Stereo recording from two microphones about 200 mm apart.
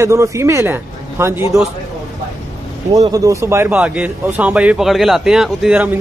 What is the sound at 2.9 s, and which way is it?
Speech, 15° right (ahead or behind).